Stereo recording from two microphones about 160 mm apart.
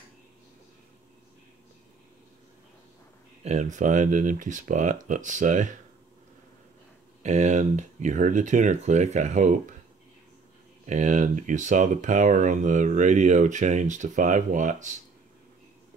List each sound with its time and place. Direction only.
3.4 s speech: 50° right (ahead or behind)
7.2 s speech: 45° right (ahead or behind)
10.9 s speech: 50° right (ahead or behind)